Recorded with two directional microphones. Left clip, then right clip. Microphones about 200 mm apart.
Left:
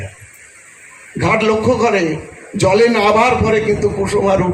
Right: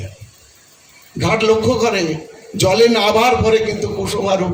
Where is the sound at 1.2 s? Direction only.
45° right (ahead or behind).